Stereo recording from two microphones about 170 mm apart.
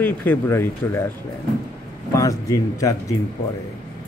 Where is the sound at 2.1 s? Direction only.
20° left (ahead or behind).